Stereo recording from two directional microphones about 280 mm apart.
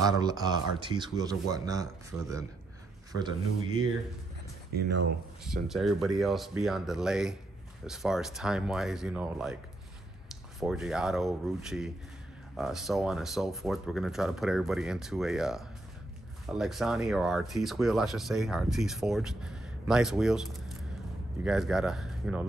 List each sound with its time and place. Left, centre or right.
0.0 s speech: centre
3.2 s speech: centre
4.7 s speech: right
5.4 s speech: centre
10.6 s speech: centre